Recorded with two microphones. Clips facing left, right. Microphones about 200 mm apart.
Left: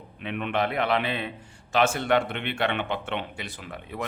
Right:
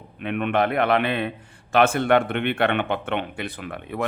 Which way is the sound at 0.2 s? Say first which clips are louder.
Right 5 dB; 55° right (ahead or behind).